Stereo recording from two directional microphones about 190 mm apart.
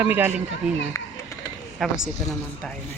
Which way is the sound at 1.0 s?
15° left (ahead or behind).